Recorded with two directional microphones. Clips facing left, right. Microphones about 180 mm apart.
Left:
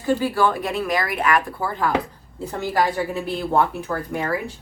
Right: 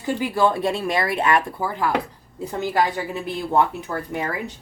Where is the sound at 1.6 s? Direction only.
15° right (ahead or behind).